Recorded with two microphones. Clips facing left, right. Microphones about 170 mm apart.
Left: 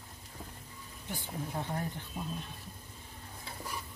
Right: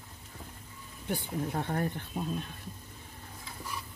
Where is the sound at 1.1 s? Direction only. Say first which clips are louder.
Right 6 dB; 60° right (ahead or behind).